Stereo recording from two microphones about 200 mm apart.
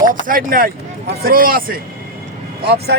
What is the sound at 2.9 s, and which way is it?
Speech, 55° right (ahead or behind).